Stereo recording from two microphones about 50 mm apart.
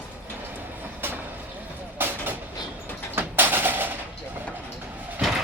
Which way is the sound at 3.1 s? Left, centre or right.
Right.